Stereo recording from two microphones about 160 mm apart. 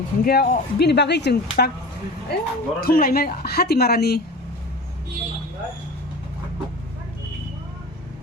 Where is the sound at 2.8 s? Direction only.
65° left (ahead or behind); by 4.2 s 80° left.